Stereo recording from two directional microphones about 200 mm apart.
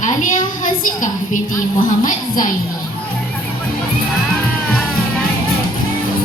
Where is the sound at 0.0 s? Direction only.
40° left (ahead or behind).